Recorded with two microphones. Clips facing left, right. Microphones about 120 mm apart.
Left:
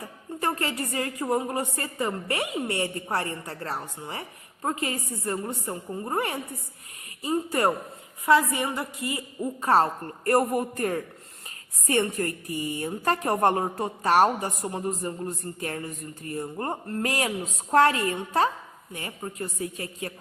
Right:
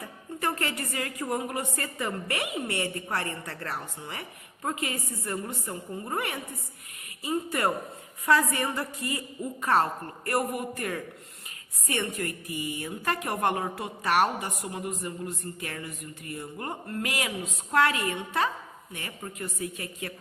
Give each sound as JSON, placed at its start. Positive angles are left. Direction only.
{"t": 0.3, "sound": "a woman's voice", "side_deg": 30}
{"t": 8.3, "sound": "a woman's voice", "side_deg": 20}
{"t": 10.2, "sound": "speech", "side_deg": 40}